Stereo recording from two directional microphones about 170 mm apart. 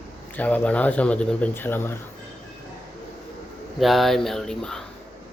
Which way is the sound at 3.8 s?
Centre (ahead or behind).